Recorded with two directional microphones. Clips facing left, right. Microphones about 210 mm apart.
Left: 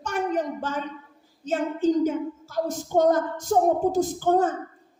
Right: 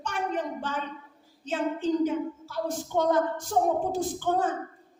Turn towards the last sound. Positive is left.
turn(degrees=45)  # may be behind; listen again after turning